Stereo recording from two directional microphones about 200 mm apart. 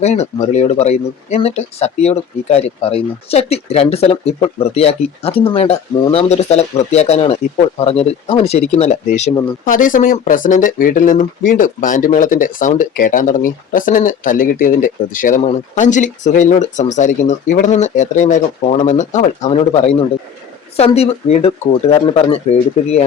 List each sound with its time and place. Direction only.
0.0 s speech: 35° left (ahead or behind)